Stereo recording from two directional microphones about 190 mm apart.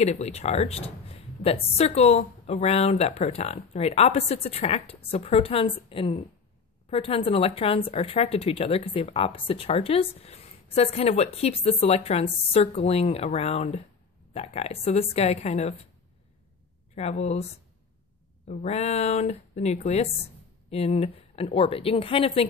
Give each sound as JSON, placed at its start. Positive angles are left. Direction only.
{"t": 0.0, "sound": "speech", "side_deg": 35}
{"t": 16.9, "sound": "speech", "side_deg": 35}
{"t": 18.5, "sound": "speech", "side_deg": 35}